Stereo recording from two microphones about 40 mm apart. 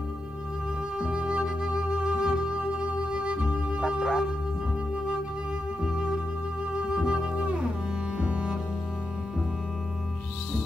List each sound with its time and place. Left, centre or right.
0.9 s music: centre
4.0 s a sound: centre
5.8 s music: centre
7.0 s music: centre
8.2 s cello: right